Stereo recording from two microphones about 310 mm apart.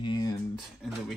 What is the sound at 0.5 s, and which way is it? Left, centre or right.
Speech, centre.